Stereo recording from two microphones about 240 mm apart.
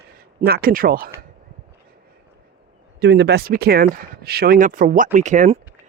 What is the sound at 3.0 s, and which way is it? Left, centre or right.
Speech, right.